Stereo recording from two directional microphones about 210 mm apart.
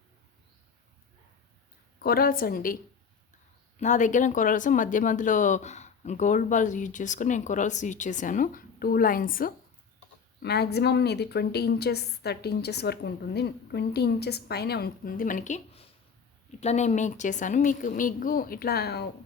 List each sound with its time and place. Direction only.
2.0 s a woman's voice: 45° left (ahead or behind)
3.8 s a woman's voice: 35° left (ahead or behind)